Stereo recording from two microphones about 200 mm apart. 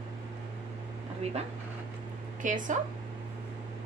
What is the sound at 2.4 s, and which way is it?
Speech, 40° right (ahead or behind).